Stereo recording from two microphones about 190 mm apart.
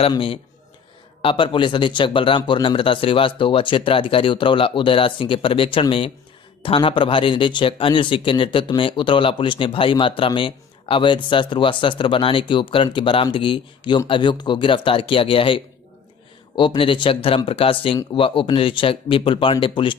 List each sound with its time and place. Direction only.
0.0 s a man's voice: 30° left (ahead or behind)